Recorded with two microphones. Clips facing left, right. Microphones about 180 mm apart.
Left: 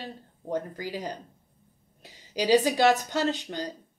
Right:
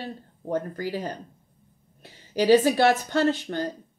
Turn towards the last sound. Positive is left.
turn(degrees=15)  # may be behind; listen again after turning